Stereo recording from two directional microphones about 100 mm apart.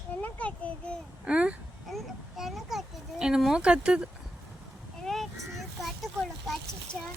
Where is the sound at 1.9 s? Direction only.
Centre (ahead or behind).